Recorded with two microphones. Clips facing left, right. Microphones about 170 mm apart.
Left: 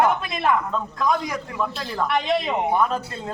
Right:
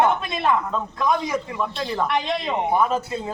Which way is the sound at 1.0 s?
20° right (ahead or behind).